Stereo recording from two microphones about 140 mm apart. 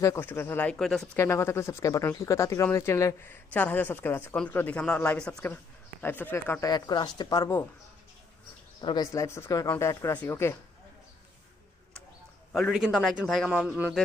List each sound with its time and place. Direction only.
0.0 s speech: 20° left (ahead or behind); by 1.0 s 5° left (ahead or behind)
1.1 s speech: 20° left (ahead or behind)
8.8 s speech: 35° left (ahead or behind)
9.1 s speech: 20° left (ahead or behind)
12.5 s a man's voice: centre (ahead or behind)
13.5 s a man's voice: 10° right (ahead or behind)